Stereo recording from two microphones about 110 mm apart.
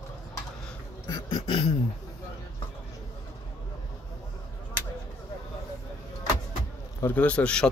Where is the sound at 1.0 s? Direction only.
35° left (ahead or behind).